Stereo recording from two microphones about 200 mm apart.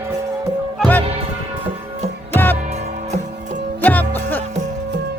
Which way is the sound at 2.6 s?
35° right (ahead or behind).